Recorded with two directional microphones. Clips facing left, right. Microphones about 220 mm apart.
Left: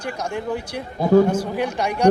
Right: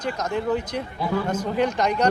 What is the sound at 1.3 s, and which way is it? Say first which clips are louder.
Speech: left 1 dB; 10° left (ahead or behind).